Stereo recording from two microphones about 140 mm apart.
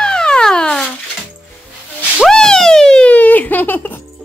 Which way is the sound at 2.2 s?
5° left (ahead or behind).